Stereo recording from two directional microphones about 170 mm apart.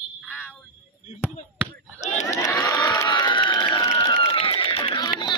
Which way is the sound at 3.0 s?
25° left (ahead or behind).